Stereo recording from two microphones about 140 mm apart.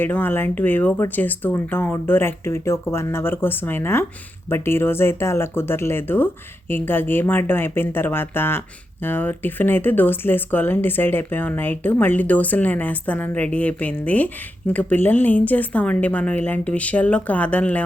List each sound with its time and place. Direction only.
0.0 s speech: 15° left (ahead or behind)